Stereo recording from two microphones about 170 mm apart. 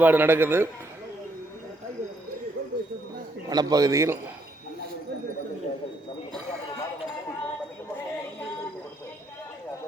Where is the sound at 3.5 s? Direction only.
25° right (ahead or behind).